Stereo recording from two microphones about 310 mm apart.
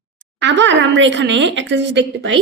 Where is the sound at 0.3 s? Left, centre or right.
Right.